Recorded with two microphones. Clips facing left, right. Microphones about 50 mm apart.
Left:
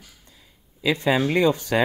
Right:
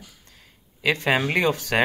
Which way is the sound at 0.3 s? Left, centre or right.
Right.